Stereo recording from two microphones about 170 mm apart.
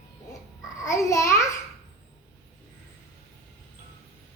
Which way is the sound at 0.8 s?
20° left (ahead or behind).